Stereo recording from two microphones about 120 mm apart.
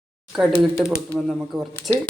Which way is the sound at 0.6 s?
5° right (ahead or behind).